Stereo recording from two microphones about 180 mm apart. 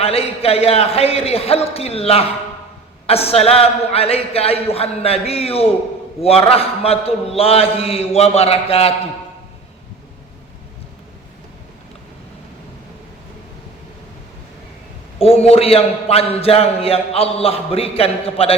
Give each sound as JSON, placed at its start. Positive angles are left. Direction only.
{"t": 0.0, "sound": "a man's voice", "side_deg": 35}
{"t": 15.2, "sound": "a man's voice", "side_deg": 35}